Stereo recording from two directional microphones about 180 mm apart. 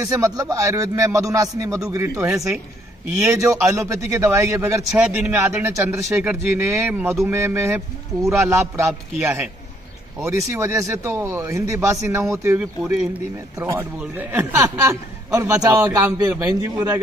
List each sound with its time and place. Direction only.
0.0 s speech: 15° right (ahead or behind)